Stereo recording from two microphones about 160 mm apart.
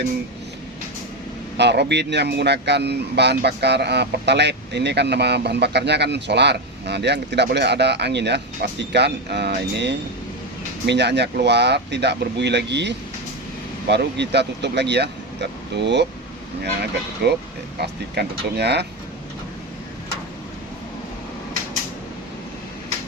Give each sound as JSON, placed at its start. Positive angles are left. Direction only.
{"t": 1.5, "sound": "speech", "side_deg": -90}
{"t": 17.2, "sound": "speech", "side_deg": -90}